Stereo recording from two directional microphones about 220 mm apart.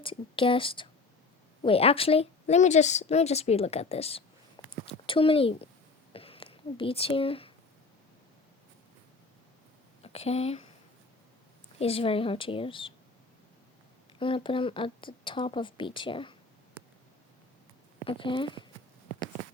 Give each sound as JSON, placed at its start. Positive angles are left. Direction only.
{"t": 0.0, "sound": "a woman's voice", "side_deg": 25}
{"t": 6.1, "sound": "a sound", "side_deg": 25}
{"t": 10.0, "sound": "speech", "side_deg": 30}
{"t": 11.8, "sound": "a woman's voice", "side_deg": 25}
{"t": 14.2, "sound": "a woman's voice", "side_deg": 25}
{"t": 18.0, "sound": "a woman's voice", "side_deg": 25}